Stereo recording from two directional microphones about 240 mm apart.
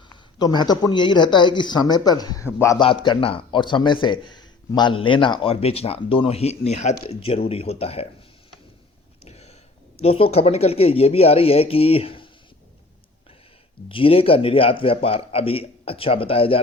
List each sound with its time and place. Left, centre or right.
0.1 s speech: centre
9.2 s a sound: left
10.0 s speech: left
13.8 s speech: left